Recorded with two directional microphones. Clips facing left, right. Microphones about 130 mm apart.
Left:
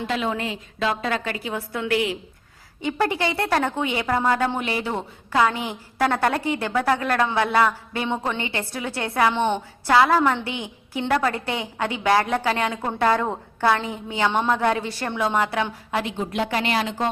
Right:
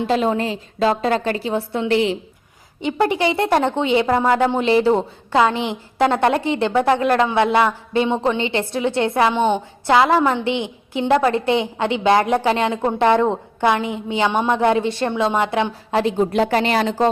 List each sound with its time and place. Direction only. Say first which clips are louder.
0.1 s a woman's voice: right 7 dB; 35° right (ahead or behind); by 4.7 s 20° right (ahead or behind)
4.7 s a woman's voice: right 11 dB; 30° right (ahead or behind)